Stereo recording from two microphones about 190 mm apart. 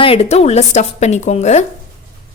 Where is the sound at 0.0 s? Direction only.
30° left (ahead or behind).